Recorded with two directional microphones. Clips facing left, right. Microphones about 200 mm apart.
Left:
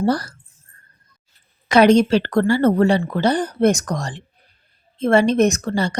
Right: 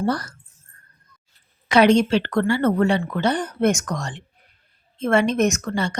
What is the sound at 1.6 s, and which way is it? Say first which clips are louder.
Speech: left 3 dB; 40° left (ahead or behind).